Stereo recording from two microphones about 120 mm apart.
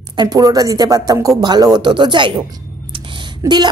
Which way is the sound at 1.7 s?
40° right (ahead or behind).